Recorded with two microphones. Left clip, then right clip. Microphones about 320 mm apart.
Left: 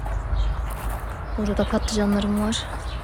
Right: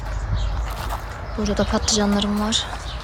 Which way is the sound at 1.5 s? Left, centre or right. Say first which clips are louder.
Right 3 dB; centre.